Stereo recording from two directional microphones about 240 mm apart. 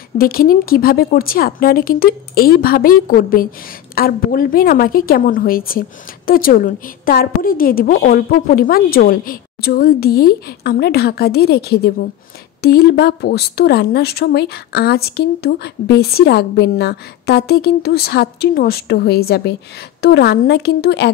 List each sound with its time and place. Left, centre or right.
0.2 s a woman's voice: left